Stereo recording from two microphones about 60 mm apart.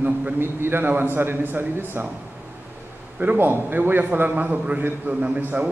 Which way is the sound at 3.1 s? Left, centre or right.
Right.